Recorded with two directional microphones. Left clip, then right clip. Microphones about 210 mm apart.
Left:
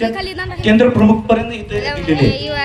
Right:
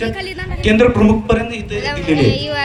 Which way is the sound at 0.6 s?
20° right (ahead or behind).